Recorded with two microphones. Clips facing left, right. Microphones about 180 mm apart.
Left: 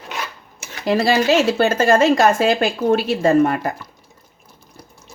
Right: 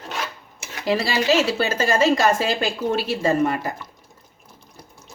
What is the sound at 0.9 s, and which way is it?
A woman's voice, 50° left (ahead or behind).